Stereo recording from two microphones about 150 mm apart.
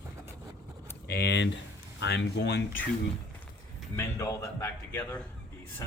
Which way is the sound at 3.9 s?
20° left (ahead or behind).